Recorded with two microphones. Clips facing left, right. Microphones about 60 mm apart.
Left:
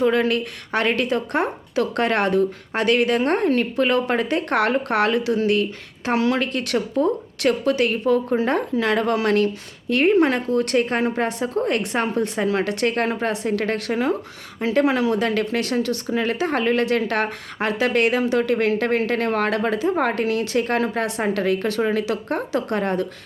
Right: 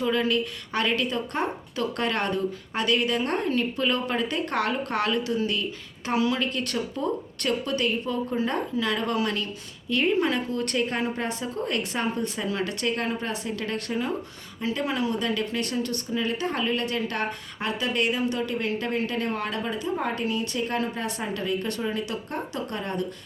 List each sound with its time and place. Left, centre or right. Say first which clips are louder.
0.0 s speech: left 5 dB; left
1.1 s speech: left 6 dB; left
9.9 s speech: left 6 dB; left
13.7 s speech: left 6 dB; left
14.8 s speech: left 7 dB; left
21.4 s speech: left 5 dB; left